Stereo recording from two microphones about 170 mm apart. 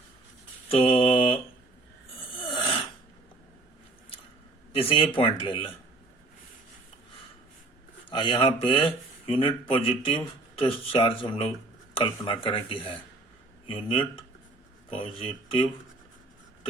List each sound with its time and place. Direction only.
0.7 s mantra: 30° left (ahead or behind)
2.4 s a sound: 30° left (ahead or behind)
4.7 s speech: 35° left (ahead or behind)
8.1 s speech: 30° left (ahead or behind)
15.1 s speech: 30° left (ahead or behind)